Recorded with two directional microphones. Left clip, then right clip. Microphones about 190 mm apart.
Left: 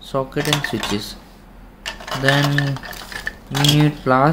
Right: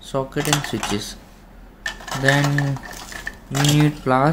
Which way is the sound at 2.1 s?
5° right (ahead or behind).